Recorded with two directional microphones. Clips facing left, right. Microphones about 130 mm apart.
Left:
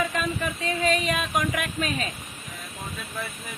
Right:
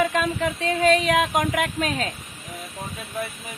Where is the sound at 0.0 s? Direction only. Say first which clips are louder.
Right 5 dB; 90° right.